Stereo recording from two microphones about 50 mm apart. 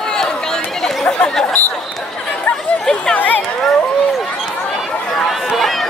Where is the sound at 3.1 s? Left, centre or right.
Left.